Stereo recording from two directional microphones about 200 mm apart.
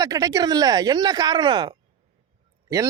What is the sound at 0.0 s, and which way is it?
Speech, 20° right (ahead or behind).